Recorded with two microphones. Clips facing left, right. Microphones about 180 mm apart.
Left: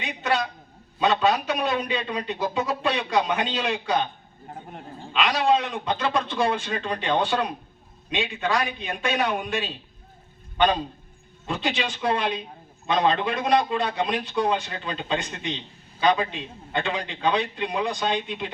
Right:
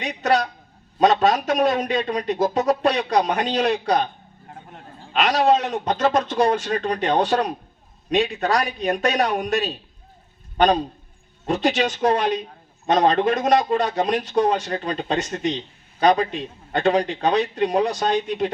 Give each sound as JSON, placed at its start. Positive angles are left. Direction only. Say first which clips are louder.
{"t": 0.0, "sound": "a man's voice", "louder": "right 5 dB", "side_deg": -40}
{"t": 5.1, "sound": "a man's voice", "louder": "right 4 dB", "side_deg": -40}